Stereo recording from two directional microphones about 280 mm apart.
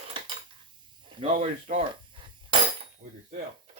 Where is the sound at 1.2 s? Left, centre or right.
Right.